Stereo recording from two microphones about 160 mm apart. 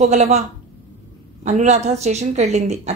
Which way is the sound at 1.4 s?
45° right (ahead or behind).